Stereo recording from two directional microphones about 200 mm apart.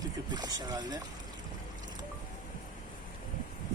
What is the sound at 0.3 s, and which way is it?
Speech, 20° right (ahead or behind).